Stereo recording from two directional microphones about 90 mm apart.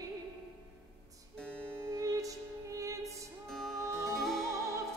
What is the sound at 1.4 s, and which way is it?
Music, 15° left (ahead or behind).